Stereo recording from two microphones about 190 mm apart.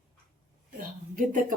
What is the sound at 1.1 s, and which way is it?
Speech, 45° right (ahead or behind).